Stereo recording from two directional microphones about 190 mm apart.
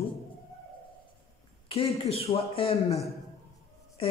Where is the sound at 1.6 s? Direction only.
30° left (ahead or behind).